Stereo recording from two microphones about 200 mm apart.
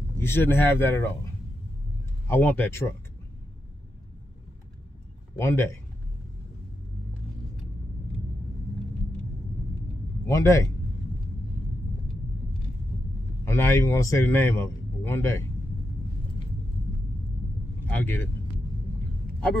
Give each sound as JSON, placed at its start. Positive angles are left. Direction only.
{"t": 0.2, "sound": "a man's voice", "side_deg": 10}
{"t": 2.2, "sound": "a man's voice", "side_deg": 10}
{"t": 5.4, "sound": "a man's voice", "side_deg": 15}
{"t": 10.2, "sound": "a man's voice", "side_deg": 15}
{"t": 13.5, "sound": "a man's voice", "side_deg": 15}
{"t": 17.8, "sound": "speech", "side_deg": 10}